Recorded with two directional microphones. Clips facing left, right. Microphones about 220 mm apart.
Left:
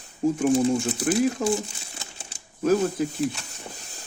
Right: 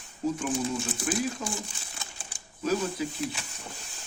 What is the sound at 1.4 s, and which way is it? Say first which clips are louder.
Speech: left 11 dB; 50° left (ahead or behind).